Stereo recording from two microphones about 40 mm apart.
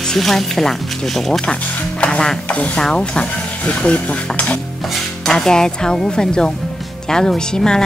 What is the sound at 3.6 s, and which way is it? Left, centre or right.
Cutlery, left.